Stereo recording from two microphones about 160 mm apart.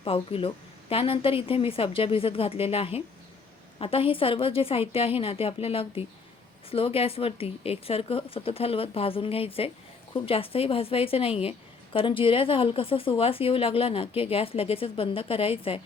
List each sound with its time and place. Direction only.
0.0 s speech: 35° left (ahead or behind)